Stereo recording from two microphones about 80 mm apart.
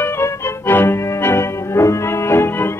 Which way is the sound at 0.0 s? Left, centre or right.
Left.